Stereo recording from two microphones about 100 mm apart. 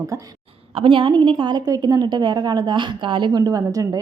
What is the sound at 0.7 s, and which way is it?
A woman's voice, 60° right (ahead or behind).